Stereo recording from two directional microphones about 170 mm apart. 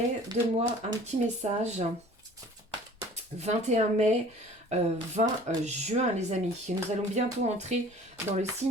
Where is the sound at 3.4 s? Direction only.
40° right (ahead or behind).